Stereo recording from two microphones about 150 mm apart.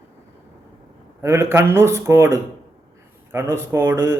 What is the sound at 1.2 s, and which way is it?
A man's voice, 20° right (ahead or behind).